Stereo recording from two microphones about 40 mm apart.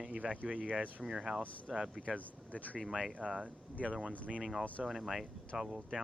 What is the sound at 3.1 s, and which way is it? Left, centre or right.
Speech, right.